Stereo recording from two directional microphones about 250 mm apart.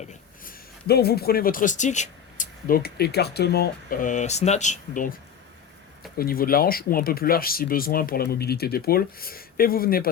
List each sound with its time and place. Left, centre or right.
0.0 s speech: left